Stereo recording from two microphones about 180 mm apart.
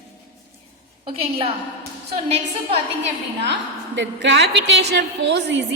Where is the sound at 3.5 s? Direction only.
80° right.